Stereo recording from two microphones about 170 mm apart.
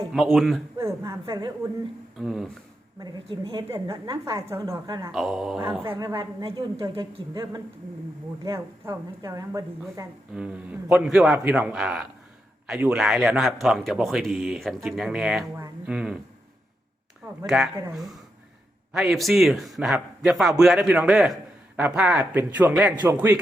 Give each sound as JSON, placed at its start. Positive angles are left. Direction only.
{"t": 0.1, "sound": "a man's voice", "side_deg": 0}
{"t": 0.8, "sound": "a sound", "side_deg": -15}
{"t": 1.2, "sound": "a woman's voice", "side_deg": -25}
{"t": 2.1, "sound": "a man's voice", "side_deg": 0}
{"t": 3.0, "sound": "a woman's voice", "side_deg": -30}
{"t": 3.8, "sound": "a woman's voice", "side_deg": -20}
{"t": 5.1, "sound": "a man's voice", "side_deg": 0}
{"t": 5.8, "sound": "a man's voice", "side_deg": -15}
{"t": 6.4, "sound": "a woman's voice", "side_deg": -30}
{"t": 10.3, "sound": "a man's voice", "side_deg": -5}
{"t": 17.4, "sound": "a man's voice", "side_deg": 0}